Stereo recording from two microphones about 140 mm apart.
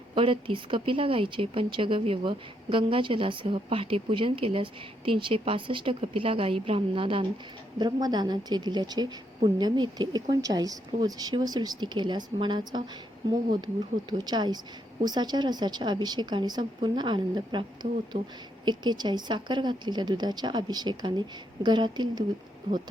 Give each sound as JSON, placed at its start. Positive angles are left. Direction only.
{"t": 0.1, "sound": "speech", "side_deg": -40}
{"t": 14.1, "sound": "speech", "side_deg": -30}